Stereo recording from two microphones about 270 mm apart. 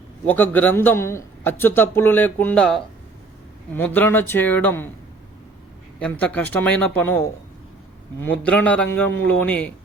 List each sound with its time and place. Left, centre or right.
0.3 s a man's voice: centre
6.0 s speech: centre
8.6 s speech: centre